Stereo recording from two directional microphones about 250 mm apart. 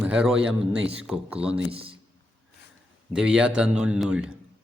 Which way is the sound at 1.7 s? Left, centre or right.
Right.